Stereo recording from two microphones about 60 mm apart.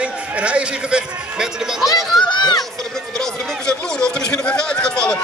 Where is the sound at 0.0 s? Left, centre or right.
Centre.